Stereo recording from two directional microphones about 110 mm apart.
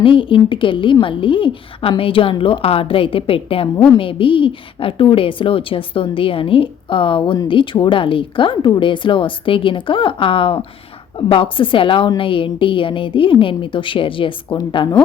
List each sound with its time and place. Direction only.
0.0 s a woman's voice: 50° left (ahead or behind)